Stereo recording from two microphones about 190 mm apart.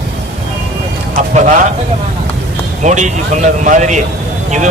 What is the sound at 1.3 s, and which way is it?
Speech, 40° right (ahead or behind).